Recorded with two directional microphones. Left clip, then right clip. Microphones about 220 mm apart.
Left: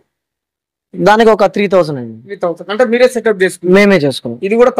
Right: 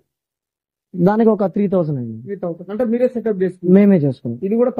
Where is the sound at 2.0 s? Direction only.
10° left (ahead or behind).